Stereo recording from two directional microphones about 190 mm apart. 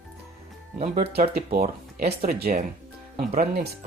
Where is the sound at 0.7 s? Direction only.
35° right (ahead or behind).